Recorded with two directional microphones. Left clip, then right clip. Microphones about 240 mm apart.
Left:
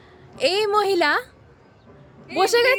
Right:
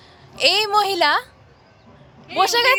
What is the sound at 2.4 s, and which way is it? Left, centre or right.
Speech, left.